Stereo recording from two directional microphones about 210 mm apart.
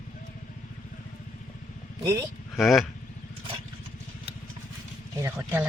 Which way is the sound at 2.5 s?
Centre (ahead or behind).